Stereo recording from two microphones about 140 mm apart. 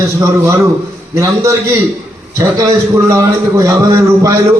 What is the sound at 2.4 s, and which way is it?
A man's voice, 20° right (ahead or behind).